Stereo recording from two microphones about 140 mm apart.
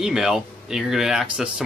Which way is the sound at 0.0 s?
5° right (ahead or behind).